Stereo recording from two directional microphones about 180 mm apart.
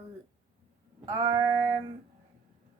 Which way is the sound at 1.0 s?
20° right (ahead or behind).